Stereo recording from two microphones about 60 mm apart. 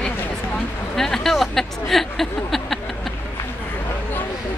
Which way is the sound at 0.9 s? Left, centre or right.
Centre.